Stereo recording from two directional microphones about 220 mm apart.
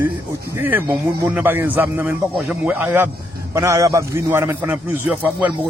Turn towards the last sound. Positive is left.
turn(degrees=-5)  # may be behind; listen again after turning